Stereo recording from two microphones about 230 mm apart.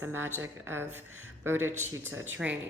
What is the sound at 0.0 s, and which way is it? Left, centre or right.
Speech, centre.